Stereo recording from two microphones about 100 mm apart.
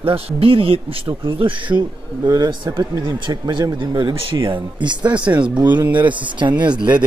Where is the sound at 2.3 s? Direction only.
40° right (ahead or behind).